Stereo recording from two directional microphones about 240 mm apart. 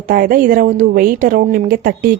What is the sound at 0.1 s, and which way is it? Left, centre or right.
Speech, right.